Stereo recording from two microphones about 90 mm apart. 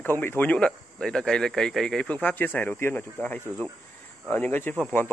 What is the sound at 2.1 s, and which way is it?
Speech, 15° left (ahead or behind).